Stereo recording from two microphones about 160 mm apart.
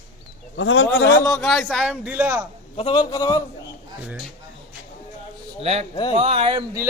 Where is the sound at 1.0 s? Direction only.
20° left (ahead or behind).